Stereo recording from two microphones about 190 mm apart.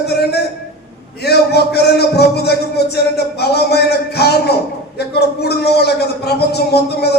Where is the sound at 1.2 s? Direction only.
55° left (ahead or behind).